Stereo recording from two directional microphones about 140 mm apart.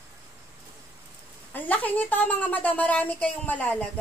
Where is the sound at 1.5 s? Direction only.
10° left (ahead or behind).